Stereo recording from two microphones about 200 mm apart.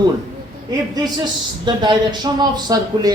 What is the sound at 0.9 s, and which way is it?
Speech, 20° right (ahead or behind).